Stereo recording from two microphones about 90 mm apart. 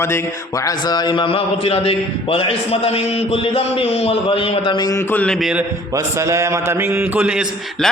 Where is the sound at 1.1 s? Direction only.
80° left.